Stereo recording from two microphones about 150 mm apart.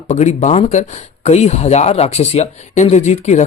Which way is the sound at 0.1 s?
50° left (ahead or behind).